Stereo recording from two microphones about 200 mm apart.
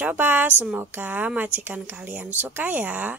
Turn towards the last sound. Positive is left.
turn(degrees=-5)  # may be behind; listen again after turning